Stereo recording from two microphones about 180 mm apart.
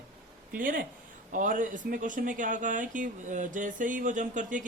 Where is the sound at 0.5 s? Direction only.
50° right (ahead or behind).